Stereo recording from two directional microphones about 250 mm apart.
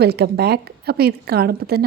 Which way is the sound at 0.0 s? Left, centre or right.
Right.